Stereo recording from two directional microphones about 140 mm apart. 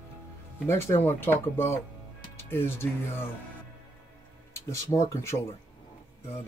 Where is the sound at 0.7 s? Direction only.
20° left (ahead or behind).